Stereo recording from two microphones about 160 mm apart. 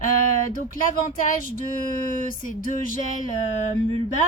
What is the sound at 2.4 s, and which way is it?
Speech, 55° left (ahead or behind).